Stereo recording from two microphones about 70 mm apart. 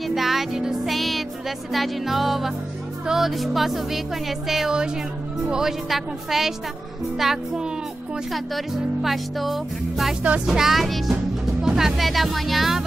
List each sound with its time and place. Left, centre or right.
0.1 s music: centre
1.7 s speech: centre
10.2 s speech: centre
10.5 s speech: centre